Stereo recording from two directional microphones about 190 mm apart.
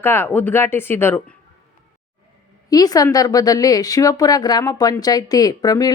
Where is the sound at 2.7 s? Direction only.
20° left (ahead or behind).